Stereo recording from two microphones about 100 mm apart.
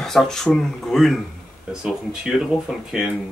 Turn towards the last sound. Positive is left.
turn(degrees=-5)  # may be behind; listen again after turning